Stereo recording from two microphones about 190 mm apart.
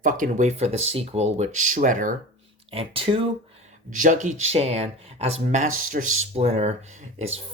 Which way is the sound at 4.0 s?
40° right (ahead or behind).